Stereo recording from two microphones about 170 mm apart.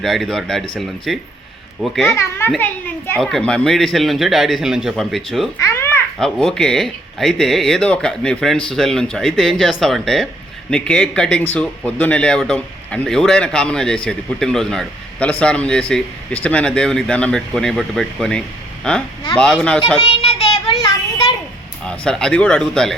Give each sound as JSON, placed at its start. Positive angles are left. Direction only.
{"t": 0.0, "sound": "speech", "side_deg": 0}
{"t": 5.5, "sound": "babbling", "side_deg": 15}
{"t": 6.1, "sound": "speech", "side_deg": 0}
{"t": 20.0, "sound": "child singing", "side_deg": 30}
{"t": 21.8, "sound": "speech", "side_deg": 5}